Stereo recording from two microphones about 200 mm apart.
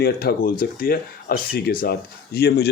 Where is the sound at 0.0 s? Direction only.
50° left (ahead or behind).